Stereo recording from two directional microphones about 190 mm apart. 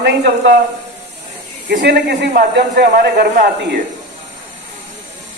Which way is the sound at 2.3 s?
50° right (ahead or behind).